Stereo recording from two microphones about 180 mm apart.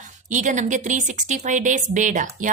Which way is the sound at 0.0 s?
45° right (ahead or behind).